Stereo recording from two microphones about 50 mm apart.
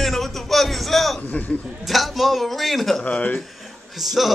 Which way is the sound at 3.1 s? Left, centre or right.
Left.